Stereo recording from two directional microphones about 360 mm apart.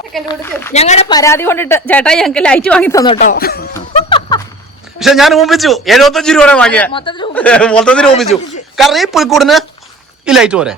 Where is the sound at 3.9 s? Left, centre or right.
Centre.